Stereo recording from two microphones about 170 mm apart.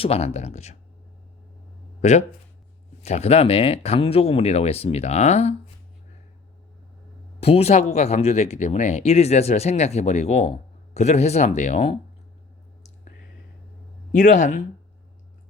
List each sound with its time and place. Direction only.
0.0 s speech: 40° left (ahead or behind)
2.0 s speech: 45° left (ahead or behind)
7.3 s speech: 35° left (ahead or behind)
14.1 s speech: 50° left (ahead or behind)